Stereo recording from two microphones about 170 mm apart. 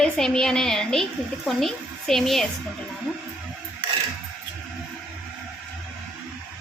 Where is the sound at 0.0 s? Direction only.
5° left (ahead or behind).